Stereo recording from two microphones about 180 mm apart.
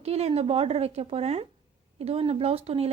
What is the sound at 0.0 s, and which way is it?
A woman's voice, 35° right (ahead or behind).